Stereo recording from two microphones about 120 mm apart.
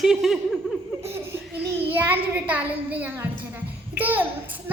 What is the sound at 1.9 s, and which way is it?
A child's voice, 15° right (ahead or behind).